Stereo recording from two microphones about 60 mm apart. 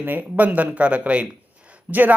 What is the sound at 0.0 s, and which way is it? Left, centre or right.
Speech, right.